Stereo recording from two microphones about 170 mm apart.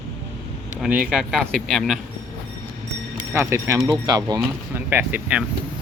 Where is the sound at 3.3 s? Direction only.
15° right (ahead or behind).